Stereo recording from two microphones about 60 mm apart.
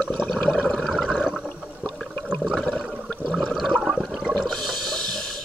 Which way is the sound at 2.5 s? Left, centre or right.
Centre.